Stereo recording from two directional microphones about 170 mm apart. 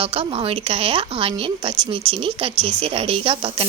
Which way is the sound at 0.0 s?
35° right (ahead or behind).